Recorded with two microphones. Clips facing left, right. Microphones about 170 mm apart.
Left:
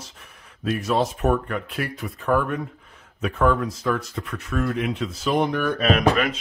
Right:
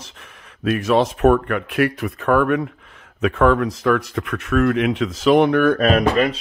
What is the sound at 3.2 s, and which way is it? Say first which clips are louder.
Speech: right 5 dB; 85° right.